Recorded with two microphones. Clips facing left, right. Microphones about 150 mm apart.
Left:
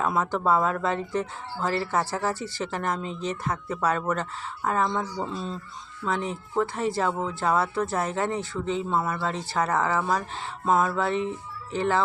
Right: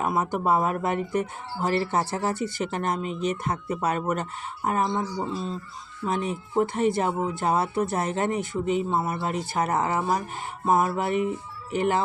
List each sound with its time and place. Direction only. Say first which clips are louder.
0.0 s speech: even; 15° right (ahead or behind)
5.3 s speech: right 2 dB; centre (ahead or behind)
6.1 s speech: right 1 dB; 20° right (ahead or behind)